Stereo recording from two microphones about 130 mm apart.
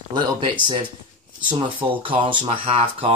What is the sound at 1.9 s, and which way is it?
Speech, 40° right (ahead or behind).